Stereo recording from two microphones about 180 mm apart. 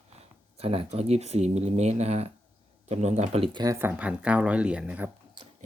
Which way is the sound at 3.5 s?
20° right (ahead or behind).